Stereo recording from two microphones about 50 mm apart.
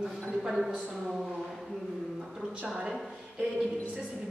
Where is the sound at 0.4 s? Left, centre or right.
Centre.